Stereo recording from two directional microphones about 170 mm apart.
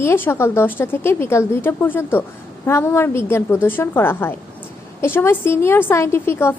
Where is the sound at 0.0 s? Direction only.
15° left (ahead or behind).